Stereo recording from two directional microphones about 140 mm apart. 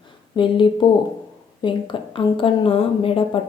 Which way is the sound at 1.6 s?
35° left (ahead or behind).